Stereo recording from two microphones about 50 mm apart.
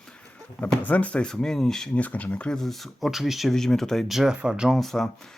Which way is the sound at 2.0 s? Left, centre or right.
Left.